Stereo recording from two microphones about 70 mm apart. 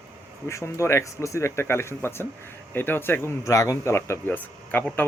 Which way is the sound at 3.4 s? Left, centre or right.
Left.